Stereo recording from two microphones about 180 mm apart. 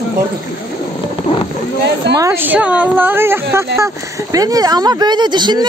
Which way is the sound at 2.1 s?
15° right (ahead or behind).